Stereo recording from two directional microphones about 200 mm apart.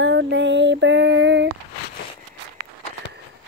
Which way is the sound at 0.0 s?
60° right (ahead or behind).